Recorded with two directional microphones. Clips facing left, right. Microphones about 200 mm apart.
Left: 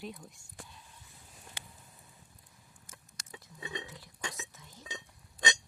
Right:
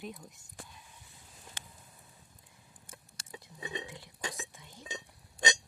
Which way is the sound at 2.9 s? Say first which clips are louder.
Right 2 dB; 30° right (ahead or behind).